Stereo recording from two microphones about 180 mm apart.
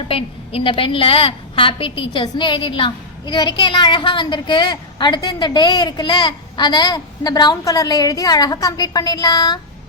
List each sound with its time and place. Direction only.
0.1 s a woman's voice: 30° left (ahead or behind)